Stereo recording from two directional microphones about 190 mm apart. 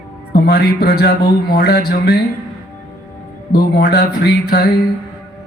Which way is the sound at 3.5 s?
60° left (ahead or behind).